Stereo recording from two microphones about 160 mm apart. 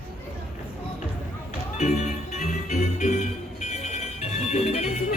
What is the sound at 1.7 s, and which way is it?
Music, 45° left (ahead or behind).